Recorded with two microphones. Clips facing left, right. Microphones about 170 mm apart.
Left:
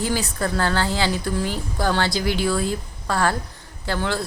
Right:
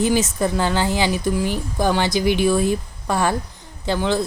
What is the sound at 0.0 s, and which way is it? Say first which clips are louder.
Speech: right 5 dB; 20° right (ahead or behind).